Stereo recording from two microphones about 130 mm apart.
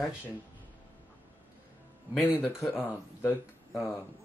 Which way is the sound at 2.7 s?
15° left (ahead or behind).